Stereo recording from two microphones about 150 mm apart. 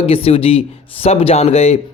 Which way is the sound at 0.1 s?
40° left (ahead or behind).